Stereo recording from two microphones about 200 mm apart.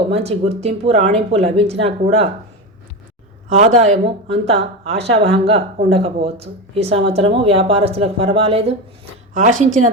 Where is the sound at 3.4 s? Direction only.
35° right (ahead or behind).